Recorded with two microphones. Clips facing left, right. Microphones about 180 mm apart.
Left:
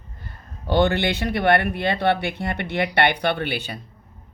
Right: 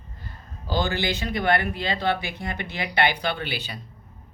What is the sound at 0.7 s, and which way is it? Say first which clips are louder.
Speech: left 6 dB; 65° left (ahead or behind).